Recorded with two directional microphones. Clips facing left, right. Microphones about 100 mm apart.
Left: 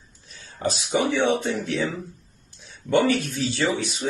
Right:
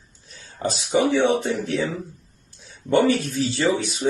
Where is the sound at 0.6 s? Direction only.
35° right (ahead or behind).